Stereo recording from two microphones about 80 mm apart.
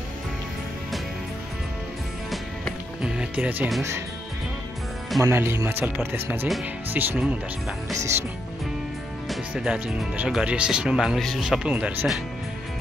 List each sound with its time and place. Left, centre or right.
3.0 s speech: centre
5.2 s speech: right
9.5 s speech: centre
11.1 s speech: centre
11.7 s speech: centre